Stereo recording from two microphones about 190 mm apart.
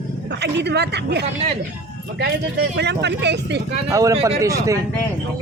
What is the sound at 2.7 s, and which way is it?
Speech, 65° right (ahead or behind).